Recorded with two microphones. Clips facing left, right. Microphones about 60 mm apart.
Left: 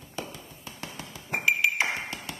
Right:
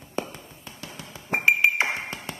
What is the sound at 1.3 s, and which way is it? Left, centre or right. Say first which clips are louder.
Ping: right 4 dB; right.